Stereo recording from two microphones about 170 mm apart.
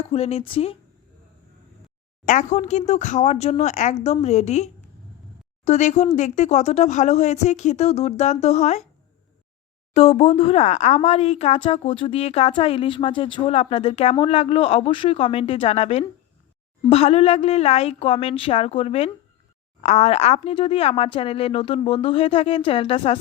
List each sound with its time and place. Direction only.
0.0 s speech: 35° left (ahead or behind)
2.2 s speech: 45° left (ahead or behind)
9.9 s speech: 40° left (ahead or behind)